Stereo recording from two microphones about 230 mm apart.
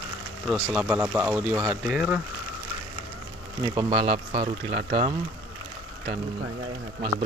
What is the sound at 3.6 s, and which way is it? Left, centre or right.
Speech, right.